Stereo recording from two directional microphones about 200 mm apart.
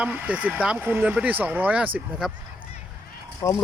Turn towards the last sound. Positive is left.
turn(degrees=15)  # may be behind; listen again after turning